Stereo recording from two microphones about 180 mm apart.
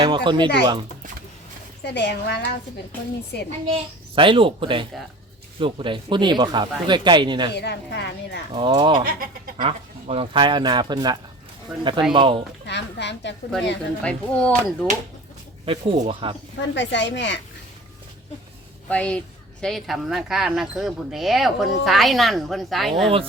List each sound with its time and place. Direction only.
0.0 s speech: 25° right (ahead or behind)
1.8 s a woman's voice: 70° left (ahead or behind)
3.7 s speech: 30° right (ahead or behind)
7.5 s a woman's voice: 70° left (ahead or behind)
8.5 s speech: 25° right (ahead or behind)
12.6 s a woman's voice: 75° left (ahead or behind)
14.0 s speech: 5° left (ahead or behind)
15.6 s speech: 30° right (ahead or behind)
16.7 s a woman's voice: 80° left
18.9 s speech: 5° left (ahead or behind)